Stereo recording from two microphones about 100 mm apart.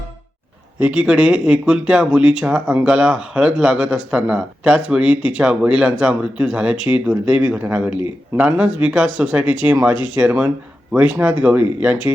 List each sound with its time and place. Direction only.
0.8 s speech: 10° right (ahead or behind)